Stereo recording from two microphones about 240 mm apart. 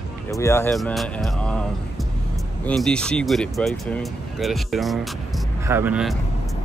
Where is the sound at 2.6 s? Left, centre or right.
Centre.